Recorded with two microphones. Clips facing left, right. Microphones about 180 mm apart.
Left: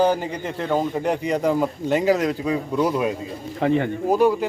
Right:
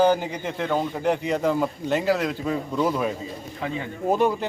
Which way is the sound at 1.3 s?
10° left (ahead or behind).